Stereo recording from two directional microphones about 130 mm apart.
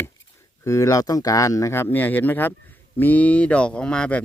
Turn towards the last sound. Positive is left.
turn(degrees=10)  # may be behind; listen again after turning